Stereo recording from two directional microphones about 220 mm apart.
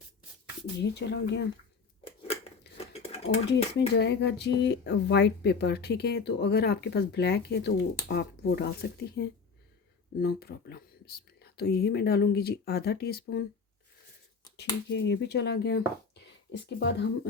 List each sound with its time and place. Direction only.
0.8 s speech: 50° left (ahead or behind)
2.2 s cutlery: 25° left (ahead or behind)
3.8 s speech: 50° left (ahead or behind)
14.5 s speech: 50° left (ahead or behind)